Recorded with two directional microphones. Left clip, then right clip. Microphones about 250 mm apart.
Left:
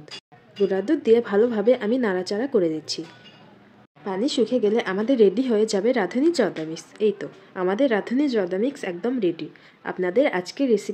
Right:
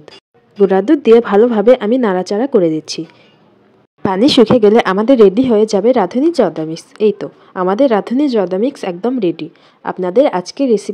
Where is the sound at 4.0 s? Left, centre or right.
Right.